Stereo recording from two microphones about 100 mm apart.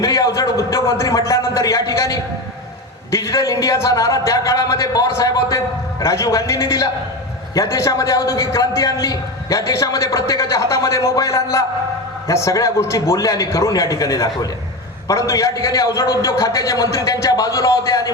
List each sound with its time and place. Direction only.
0.0 s a man's voice: 30° left (ahead or behind)